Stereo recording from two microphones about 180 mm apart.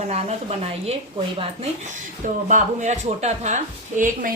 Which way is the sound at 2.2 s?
45° right (ahead or behind).